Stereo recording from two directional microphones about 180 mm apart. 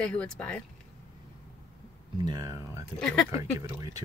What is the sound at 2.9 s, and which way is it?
Speech, 5° left (ahead or behind).